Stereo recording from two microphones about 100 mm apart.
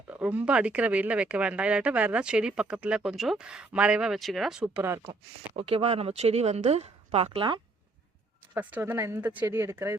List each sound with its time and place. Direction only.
0.1 s speech: 15° right (ahead or behind)
5.5 s speech: 80° right
8.5 s speech: 20° right (ahead or behind)